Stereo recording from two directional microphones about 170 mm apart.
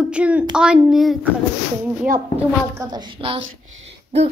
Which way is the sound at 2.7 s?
30° right (ahead or behind).